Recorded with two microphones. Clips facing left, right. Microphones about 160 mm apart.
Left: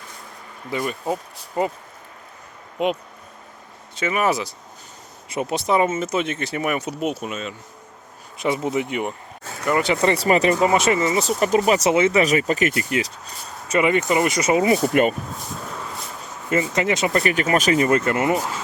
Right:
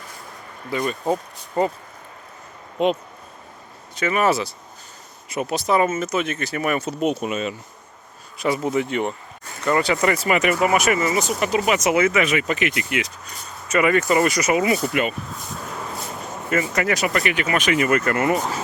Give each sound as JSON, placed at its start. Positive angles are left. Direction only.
{"t": 0.7, "sound": "speech", "side_deg": 20}
{"t": 2.7, "sound": "speech", "side_deg": 10}
{"t": 5.3, "sound": "speech", "side_deg": 25}
{"t": 8.4, "sound": "speech", "side_deg": 20}
{"t": 16.5, "sound": "speech", "side_deg": 25}
{"t": 17.2, "sound": "speech", "side_deg": 40}